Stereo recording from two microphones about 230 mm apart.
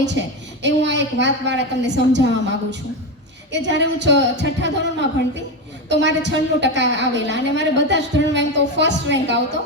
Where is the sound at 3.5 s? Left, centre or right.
Right.